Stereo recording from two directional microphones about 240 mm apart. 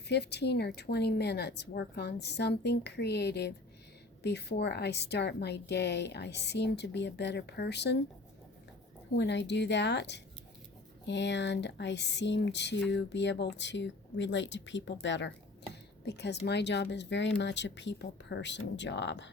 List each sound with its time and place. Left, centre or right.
0.1 s a woman's voice: left
9.1 s a woman's voice: left